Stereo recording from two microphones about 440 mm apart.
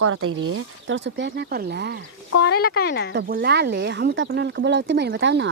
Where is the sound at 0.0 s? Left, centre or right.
Right.